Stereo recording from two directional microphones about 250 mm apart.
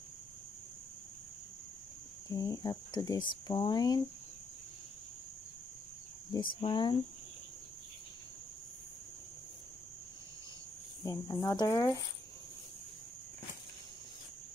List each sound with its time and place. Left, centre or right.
2.2 s speech: centre
6.3 s speech: centre
11.1 s speech: centre